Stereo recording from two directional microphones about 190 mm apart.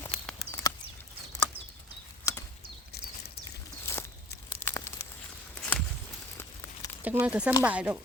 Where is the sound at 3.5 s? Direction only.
15° left (ahead or behind).